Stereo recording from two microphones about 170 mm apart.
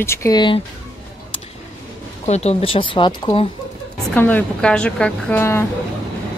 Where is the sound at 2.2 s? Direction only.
40° left (ahead or behind).